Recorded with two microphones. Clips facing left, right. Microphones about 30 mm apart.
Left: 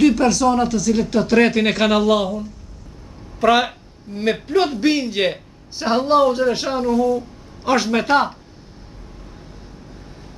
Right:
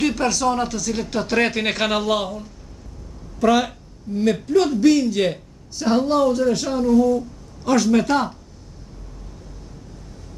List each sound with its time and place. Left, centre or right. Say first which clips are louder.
0.0 s speech: left 5 dB; centre
3.3 s speech: left 2 dB; left